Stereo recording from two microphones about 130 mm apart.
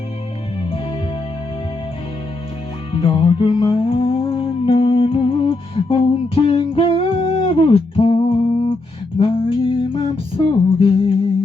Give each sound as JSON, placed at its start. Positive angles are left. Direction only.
{"t": 2.9, "sound": "music", "side_deg": 45}